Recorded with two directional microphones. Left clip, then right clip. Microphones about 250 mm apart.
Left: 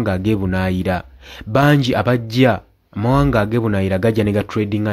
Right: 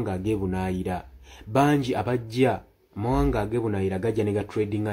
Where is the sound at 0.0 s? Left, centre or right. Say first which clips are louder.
Left 8 dB; left.